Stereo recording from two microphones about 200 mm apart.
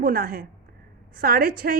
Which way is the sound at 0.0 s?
45° right (ahead or behind).